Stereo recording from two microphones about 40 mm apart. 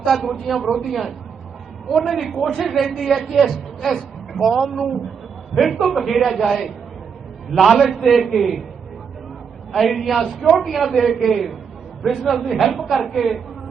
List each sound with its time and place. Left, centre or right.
0.0 s a woman's voice: centre
9.7 s a woman's voice: centre